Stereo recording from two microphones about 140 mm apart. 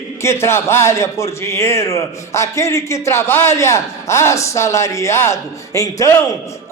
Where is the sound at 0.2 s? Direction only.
20° left (ahead or behind).